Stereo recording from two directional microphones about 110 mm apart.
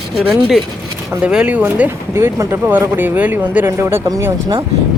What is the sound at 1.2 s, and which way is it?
Speech, 10° right (ahead or behind).